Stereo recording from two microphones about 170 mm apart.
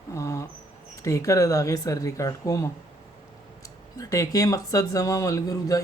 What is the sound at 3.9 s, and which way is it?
Speech, 20° left (ahead or behind).